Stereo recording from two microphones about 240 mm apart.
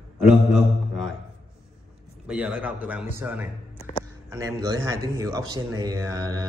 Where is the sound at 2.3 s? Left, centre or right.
Centre.